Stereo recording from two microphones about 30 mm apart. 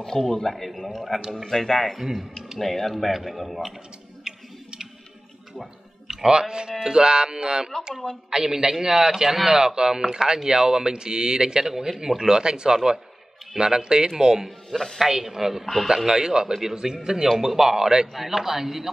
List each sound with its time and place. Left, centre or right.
0.3 s speech: centre
1.3 s speech: centre
2.0 s a man's voice: centre
2.6 s speech: centre
4.2 s tick-tock: centre
6.0 s a man's voice: centre
14.7 s speech: centre
15.0 s a man's voice: centre
15.6 s speech: centre
16.1 s speech: right
17.4 s a man's voice: centre
18.1 s a man's voice: centre